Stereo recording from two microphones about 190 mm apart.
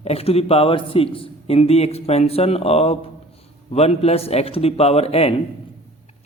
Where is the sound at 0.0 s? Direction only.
30° left (ahead or behind).